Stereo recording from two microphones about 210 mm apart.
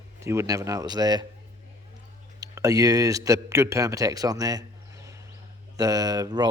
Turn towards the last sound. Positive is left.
turn(degrees=-20)  # may be behind; listen again after turning